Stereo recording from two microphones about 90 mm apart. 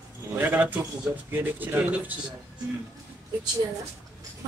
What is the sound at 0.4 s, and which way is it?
A man's voice, 20° right (ahead or behind).